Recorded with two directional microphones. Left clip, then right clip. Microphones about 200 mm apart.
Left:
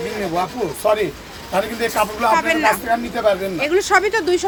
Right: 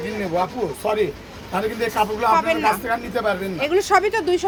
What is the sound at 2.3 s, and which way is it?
Speech, 5° left (ahead or behind).